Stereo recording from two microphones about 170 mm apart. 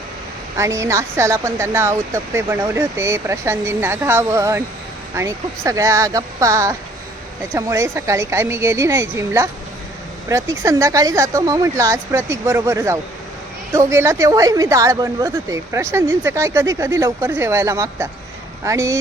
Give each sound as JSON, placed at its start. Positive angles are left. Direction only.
{"t": 0.5, "sound": "speech", "side_deg": -15}